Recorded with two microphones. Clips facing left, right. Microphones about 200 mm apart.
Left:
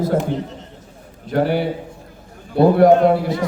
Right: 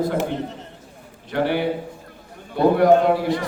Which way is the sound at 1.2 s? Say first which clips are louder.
Left 3 dB; 40° left (ahead or behind).